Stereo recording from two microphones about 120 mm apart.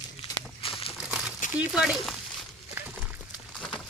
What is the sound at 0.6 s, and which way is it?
Crumpling, 50° left (ahead or behind).